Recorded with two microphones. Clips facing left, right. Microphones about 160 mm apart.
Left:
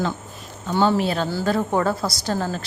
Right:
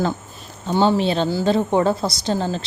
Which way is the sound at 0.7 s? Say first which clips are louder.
Right 2 dB; 20° right (ahead or behind).